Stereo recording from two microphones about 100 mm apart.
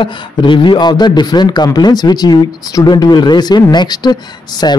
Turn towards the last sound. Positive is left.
turn(degrees=45)  # may be behind; listen again after turning